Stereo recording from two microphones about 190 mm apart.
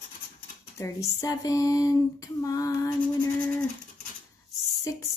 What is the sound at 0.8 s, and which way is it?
Female singing, 15° left (ahead or behind).